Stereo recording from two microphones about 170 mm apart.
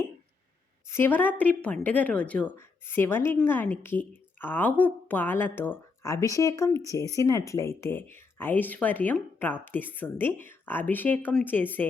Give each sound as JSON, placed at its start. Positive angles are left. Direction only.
{"t": 0.9, "sound": "speech", "side_deg": 15}